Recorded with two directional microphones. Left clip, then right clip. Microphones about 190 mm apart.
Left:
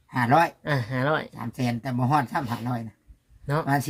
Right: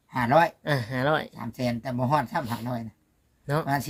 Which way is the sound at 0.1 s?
30° right (ahead or behind).